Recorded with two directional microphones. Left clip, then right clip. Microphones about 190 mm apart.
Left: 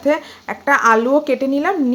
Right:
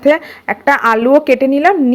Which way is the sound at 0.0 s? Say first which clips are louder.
Right 6 dB; 25° right (ahead or behind).